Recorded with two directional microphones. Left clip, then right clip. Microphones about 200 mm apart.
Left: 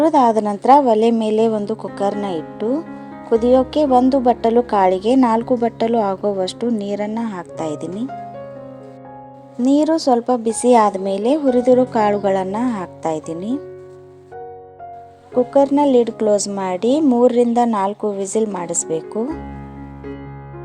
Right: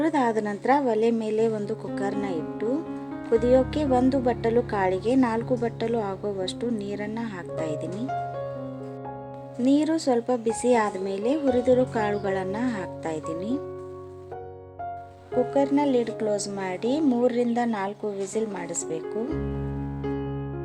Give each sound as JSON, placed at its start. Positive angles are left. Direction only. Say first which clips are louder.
{"t": 0.0, "sound": "a woman's voice", "louder": "left 10 dB", "side_deg": 30}
{"t": 9.6, "sound": "a woman's voice", "louder": "left 8 dB", "side_deg": 30}
{"t": 15.5, "sound": "a woman's voice", "louder": "left 10 dB", "side_deg": 30}